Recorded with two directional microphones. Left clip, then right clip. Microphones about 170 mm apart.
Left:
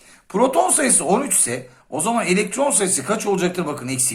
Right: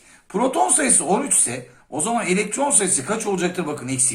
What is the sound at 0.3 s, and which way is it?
Speech, 35° left (ahead or behind).